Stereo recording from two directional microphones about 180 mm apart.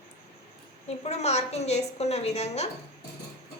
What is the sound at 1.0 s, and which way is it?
A woman's voice, 35° left (ahead or behind).